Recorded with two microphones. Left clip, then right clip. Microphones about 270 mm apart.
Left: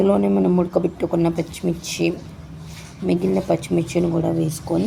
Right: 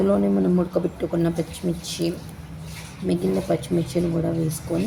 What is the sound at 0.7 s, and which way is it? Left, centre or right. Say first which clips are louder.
Speech: left 4 dB; centre.